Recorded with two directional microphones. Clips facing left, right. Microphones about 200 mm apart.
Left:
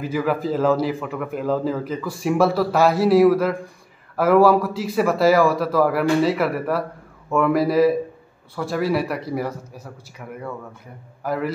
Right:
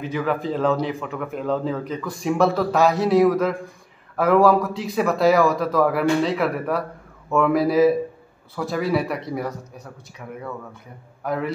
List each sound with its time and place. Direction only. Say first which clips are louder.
0.0 s a man's voice: left 2 dB; 5° left (ahead or behind)